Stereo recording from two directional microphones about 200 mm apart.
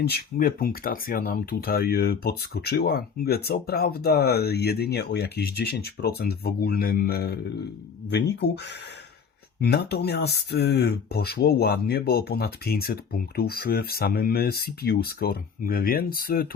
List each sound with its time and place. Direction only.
0.1 s speech: 45° left (ahead or behind)
9.6 s speech: 55° left (ahead or behind)